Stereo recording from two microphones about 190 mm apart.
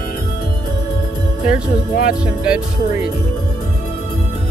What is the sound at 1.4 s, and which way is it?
Speech, 45° left (ahead or behind).